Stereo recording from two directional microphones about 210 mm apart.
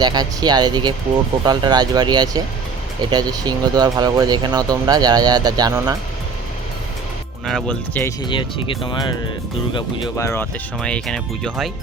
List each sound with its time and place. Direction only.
0.0 s speech: 20° right (ahead or behind)
7.4 s speech: 5° left (ahead or behind)
8.2 s speech: 25° left (ahead or behind)
10.2 s speech: 15° left (ahead or behind)